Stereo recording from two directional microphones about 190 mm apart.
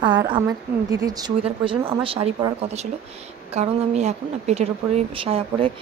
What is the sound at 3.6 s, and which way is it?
A woman's voice, 35° right (ahead or behind).